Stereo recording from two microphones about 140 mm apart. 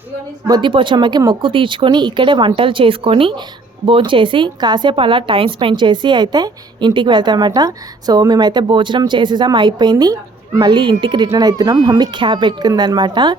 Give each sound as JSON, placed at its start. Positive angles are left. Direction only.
{"t": 0.4, "sound": "a woman's voice", "side_deg": -30}